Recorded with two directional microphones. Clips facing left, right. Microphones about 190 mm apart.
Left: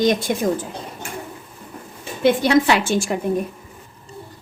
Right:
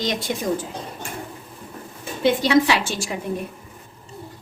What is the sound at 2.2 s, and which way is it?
Speech, 55° left (ahead or behind).